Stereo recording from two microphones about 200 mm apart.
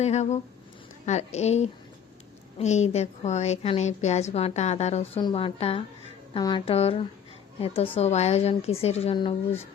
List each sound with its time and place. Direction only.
0.0 s a woman's voice: 35° left (ahead or behind)